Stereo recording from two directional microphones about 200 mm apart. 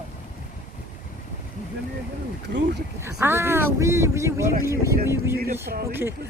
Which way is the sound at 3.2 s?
10° right (ahead or behind).